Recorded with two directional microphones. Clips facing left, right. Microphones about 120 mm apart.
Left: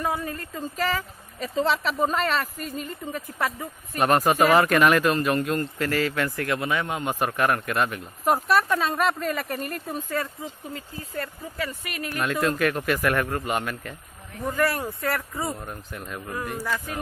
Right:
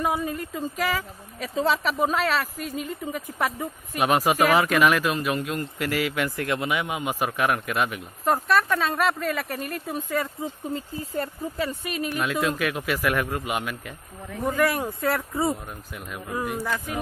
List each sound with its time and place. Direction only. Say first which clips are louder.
0.0 s a man's voice: right 2 dB; 15° right (ahead or behind)
9.9 s a man's voice: right 2 dB; 10° right (ahead or behind)
11.1 s speech: right 3 dB; 25° right (ahead or behind)
12.2 s a man's voice: left 3 dB; centre (ahead or behind); by 15.2 s 20° right (ahead or behind)